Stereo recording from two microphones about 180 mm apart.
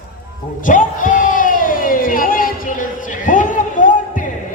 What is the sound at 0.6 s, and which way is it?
Crowd, 45° left (ahead or behind).